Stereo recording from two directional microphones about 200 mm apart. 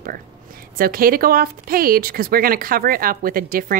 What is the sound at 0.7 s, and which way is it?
Speech, 45° right (ahead or behind).